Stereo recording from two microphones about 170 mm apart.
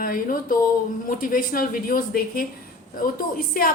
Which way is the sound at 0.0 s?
55° left (ahead or behind).